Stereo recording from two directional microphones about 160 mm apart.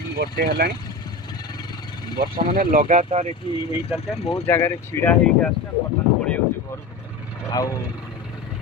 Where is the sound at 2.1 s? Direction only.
65° right (ahead or behind); by 3.3 s 45° right (ahead or behind).